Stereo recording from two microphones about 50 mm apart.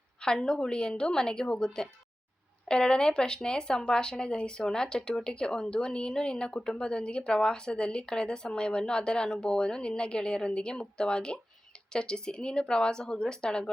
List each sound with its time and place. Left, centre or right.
0.2 s speech: centre